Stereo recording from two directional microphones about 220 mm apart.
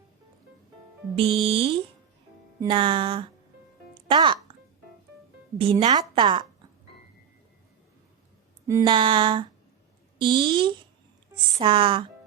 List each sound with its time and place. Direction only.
1.1 s a woman's voice: 25° right (ahead or behind)
3.9 s music: 20° right (ahead or behind)
5.5 s a woman's voice: 25° right (ahead or behind)
8.8 s a woman's voice: 25° right (ahead or behind)